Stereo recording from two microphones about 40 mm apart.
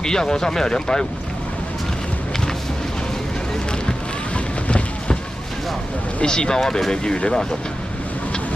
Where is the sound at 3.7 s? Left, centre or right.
Left.